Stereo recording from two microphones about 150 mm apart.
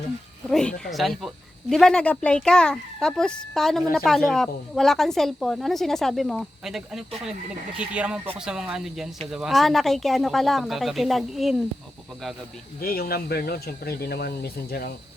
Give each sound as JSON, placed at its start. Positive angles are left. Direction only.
{"t": 0.9, "sound": "speech", "side_deg": 0}
{"t": 12.8, "sound": "speech", "side_deg": 90}